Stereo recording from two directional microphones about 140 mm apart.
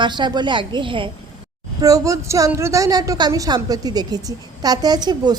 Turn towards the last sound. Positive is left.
turn(degrees=-30)  # may be behind; listen again after turning